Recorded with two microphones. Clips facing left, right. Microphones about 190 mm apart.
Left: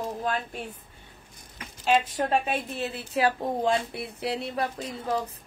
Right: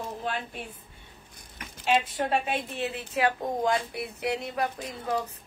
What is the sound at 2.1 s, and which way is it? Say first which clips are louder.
Speech: left 2 dB; 40° left (ahead or behind).